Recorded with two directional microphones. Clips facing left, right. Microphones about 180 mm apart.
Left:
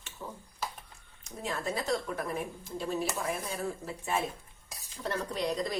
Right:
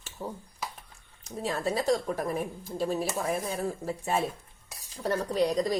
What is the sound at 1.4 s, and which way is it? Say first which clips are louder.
Speech: right 5 dB; 35° right (ahead or behind).